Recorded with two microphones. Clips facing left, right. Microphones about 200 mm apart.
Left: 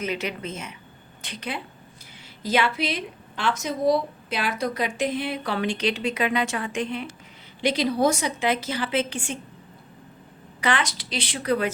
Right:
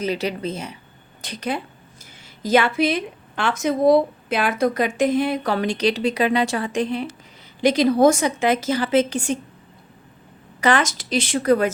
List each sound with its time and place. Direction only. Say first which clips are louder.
0.0 s a woman's voice: right 5 dB; 35° right (ahead or behind)
10.6 s a woman's voice: right 6 dB; 45° right (ahead or behind)